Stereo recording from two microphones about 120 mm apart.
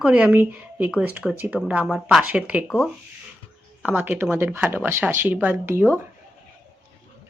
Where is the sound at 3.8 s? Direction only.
15° right (ahead or behind).